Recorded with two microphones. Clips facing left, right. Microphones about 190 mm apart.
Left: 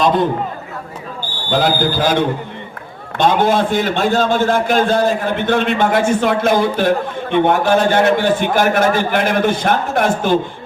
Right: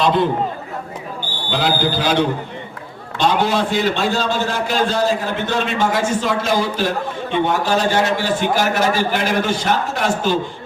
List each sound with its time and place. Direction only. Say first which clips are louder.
0.0 s a man's voice: left 2 dB; 45° left (ahead or behind)
1.5 s a man's voice: left 3 dB; 45° left (ahead or behind)